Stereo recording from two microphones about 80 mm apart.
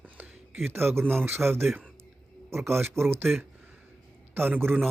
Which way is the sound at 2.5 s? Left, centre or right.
Right.